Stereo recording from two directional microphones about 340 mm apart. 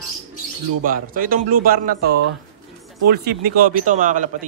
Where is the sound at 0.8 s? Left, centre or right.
Right.